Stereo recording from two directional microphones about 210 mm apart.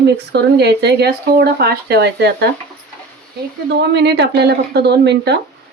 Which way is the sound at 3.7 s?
55° right (ahead or behind).